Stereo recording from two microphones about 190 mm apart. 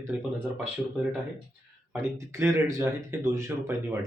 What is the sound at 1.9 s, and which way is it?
Speech, 15° right (ahead or behind).